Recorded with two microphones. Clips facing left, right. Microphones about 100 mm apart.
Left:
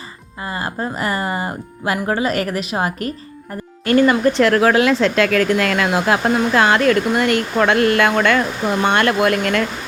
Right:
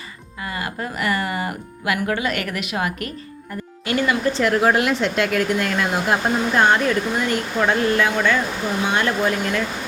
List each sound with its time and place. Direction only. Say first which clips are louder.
0.4 s speech: left 4 dB; 30° left (ahead or behind)
4.3 s speech: left 4 dB; 80° left